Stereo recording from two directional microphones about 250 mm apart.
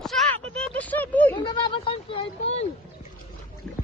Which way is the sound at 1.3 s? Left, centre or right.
Centre.